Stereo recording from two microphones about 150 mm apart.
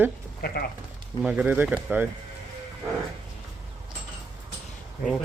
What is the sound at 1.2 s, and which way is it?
Speech, 10° right (ahead or behind).